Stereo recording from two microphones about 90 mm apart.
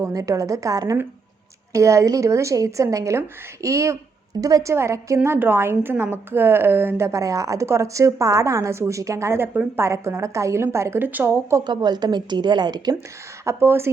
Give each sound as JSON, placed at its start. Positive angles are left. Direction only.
{"t": 0.0, "sound": "a woman's voice", "side_deg": -40}
{"t": 11.6, "sound": "a woman's voice", "side_deg": -55}
{"t": 13.4, "sound": "a woman's voice", "side_deg": -30}